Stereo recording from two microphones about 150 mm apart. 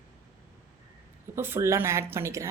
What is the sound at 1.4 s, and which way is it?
Speech, 15° right (ahead or behind).